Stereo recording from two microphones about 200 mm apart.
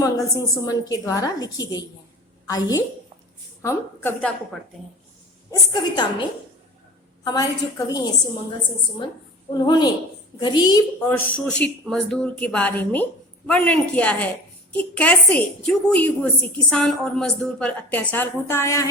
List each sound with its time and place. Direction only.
0.0 s a woman's voice: 15° left (ahead or behind)
5.5 s a woman's voice: 20° left (ahead or behind)
7.3 s a woman's voice: 15° left (ahead or behind)
9.6 s a woman's voice: 20° left (ahead or behind)
11.0 s a man's voice: 5° left (ahead or behind)